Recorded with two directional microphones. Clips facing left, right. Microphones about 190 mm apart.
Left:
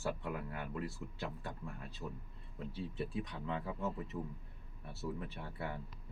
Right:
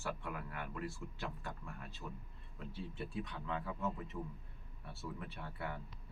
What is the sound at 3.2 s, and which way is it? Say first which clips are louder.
Speech: left 2 dB; 25° left (ahead or behind).